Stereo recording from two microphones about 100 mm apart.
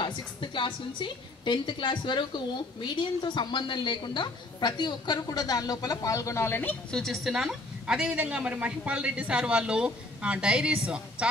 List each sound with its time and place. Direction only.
0.0 s a woman's voice: 50° left (ahead or behind); by 6.8 s 20° left (ahead or behind)
6.9 s a woman's voice: centre (ahead or behind)